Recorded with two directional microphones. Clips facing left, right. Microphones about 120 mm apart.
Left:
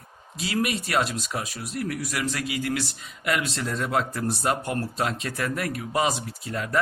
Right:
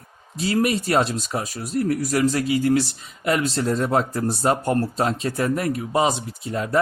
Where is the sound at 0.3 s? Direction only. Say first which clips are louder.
Right 6 dB; 35° right (ahead or behind).